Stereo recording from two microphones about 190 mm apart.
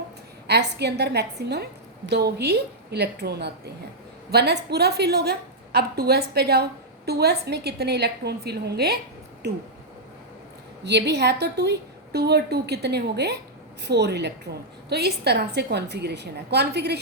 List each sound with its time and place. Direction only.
0.4 s a woman's voice: 60° right (ahead or behind)
10.8 s a woman's voice: 65° right (ahead or behind)